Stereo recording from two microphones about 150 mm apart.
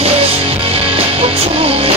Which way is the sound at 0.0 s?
40° right (ahead or behind).